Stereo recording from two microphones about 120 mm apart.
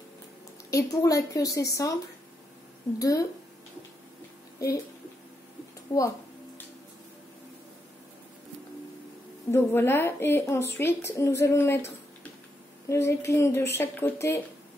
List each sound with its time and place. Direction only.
0.7 s a woman's voice: 30° left (ahead or behind)
3.0 s a woman's voice: 30° left (ahead or behind)
5.9 s speech: 25° left (ahead or behind)
9.5 s a woman's voice: 20° left (ahead or behind)